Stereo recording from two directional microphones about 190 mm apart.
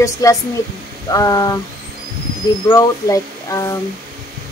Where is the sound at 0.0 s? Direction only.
15° left (ahead or behind).